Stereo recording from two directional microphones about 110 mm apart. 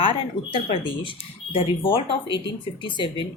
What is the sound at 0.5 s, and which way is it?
Speech, 55° left (ahead or behind).